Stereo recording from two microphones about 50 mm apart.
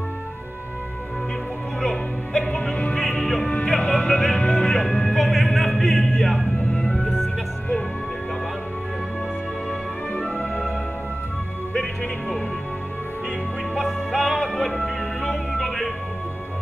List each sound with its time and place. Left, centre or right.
1.8 s music: centre
3.0 s music: centre
6.7 s music: centre
9.7 s music: centre
11.7 s music: centre
13.7 s music: centre